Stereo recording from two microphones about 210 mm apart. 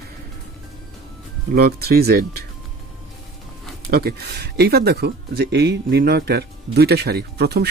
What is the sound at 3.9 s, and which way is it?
Speech, 50° right (ahead or behind).